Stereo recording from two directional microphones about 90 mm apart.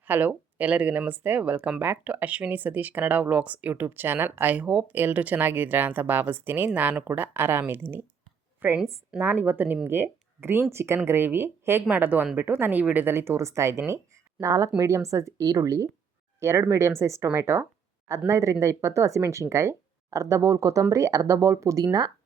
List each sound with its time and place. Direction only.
0.1 s a woman's voice: 20° right (ahead or behind); by 21.8 s 35° right (ahead or behind)